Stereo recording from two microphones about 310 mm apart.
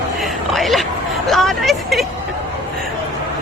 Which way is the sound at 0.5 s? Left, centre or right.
Centre.